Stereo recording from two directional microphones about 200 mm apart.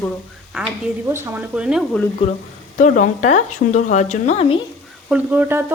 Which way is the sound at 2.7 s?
40° left (ahead or behind).